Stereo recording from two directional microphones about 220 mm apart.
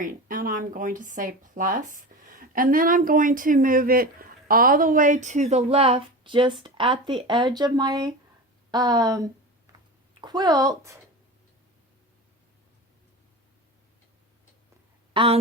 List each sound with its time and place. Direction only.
0.0 s speech: 40° right (ahead or behind); by 11.0 s 15° right (ahead or behind)
15.1 s speech: 25° right (ahead or behind)